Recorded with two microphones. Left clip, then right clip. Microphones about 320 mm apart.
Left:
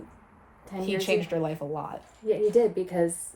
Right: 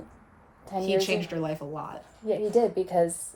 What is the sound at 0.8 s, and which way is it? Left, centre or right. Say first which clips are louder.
A woman's voice: right 1 dB; centre.